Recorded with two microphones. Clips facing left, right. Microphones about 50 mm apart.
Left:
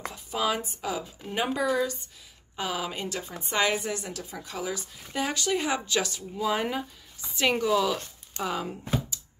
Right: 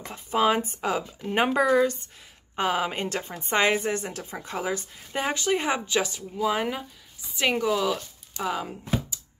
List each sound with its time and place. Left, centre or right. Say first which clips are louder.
0.1 s a woman's voice: right 7 dB; right; by 8.7 s centre